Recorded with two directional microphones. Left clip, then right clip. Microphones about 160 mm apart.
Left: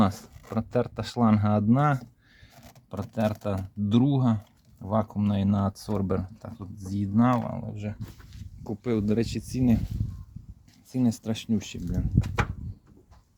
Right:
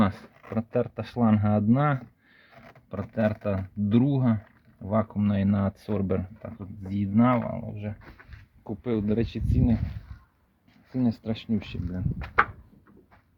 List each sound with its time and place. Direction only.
0.0 s speech: 10° left (ahead or behind)
7.7 s speech: 25° left (ahead or behind)
10.9 s speech: 20° left (ahead or behind)